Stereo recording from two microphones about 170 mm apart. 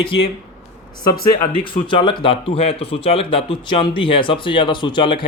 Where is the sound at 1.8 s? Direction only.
30° left (ahead or behind).